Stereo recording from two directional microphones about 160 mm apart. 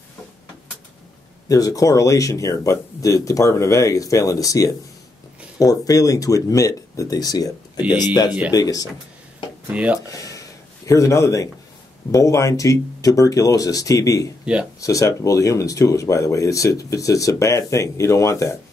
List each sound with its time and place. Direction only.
1.5 s speech: 20° left (ahead or behind)
9.7 s speech: 10° right (ahead or behind)
9.9 s speech: 20° left (ahead or behind)
14.4 s speech: 5° right (ahead or behind)
14.8 s speech: 20° left (ahead or behind)